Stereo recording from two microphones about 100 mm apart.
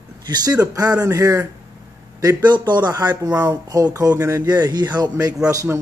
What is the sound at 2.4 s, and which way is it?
Speech, 45° right (ahead or behind).